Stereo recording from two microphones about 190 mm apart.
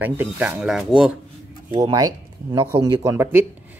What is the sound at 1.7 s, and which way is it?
Speech, 20° right (ahead or behind).